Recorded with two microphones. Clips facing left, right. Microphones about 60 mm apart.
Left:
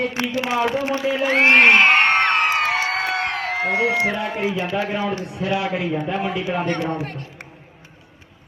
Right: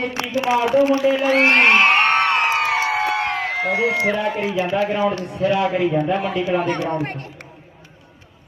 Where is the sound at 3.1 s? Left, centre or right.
Centre.